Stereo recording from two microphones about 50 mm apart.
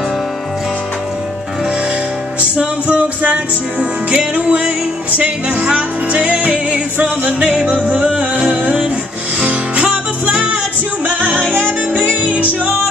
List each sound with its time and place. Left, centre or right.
2.5 s music: right